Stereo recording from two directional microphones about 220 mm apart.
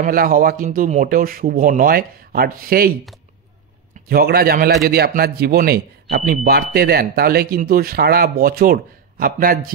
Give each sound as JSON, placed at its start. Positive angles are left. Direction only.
{"t": 0.0, "sound": "speech", "side_deg": -40}
{"t": 4.1, "sound": "speech", "side_deg": -40}